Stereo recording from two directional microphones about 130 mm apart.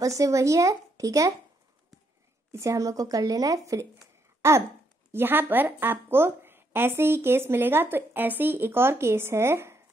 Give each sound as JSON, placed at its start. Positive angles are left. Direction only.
{"t": 0.0, "sound": "speech", "side_deg": -25}
{"t": 2.5, "sound": "speech", "side_deg": -25}
{"t": 4.4, "sound": "a sound", "side_deg": -20}
{"t": 5.1, "sound": "speech", "side_deg": -15}